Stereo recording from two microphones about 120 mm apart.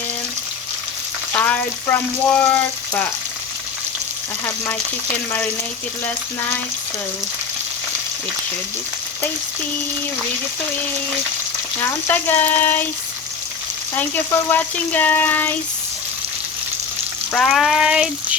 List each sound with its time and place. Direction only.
1.3 s frying: 15° left (ahead or behind)
11.8 s speech: 15° left (ahead or behind)
13.9 s speech: 15° left (ahead or behind)
17.3 s frying: 5° left (ahead or behind)